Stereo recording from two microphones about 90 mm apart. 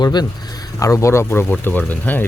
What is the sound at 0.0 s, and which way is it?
Speech, 50° left (ahead or behind).